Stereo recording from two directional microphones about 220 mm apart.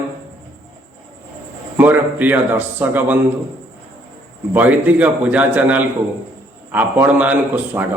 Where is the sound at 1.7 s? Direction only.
10° right (ahead or behind).